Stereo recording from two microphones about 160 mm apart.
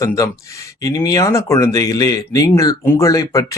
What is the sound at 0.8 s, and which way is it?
Speech, 20° left (ahead or behind).